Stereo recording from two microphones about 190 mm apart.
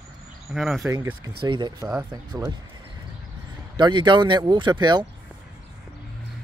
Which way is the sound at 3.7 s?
25° right (ahead or behind).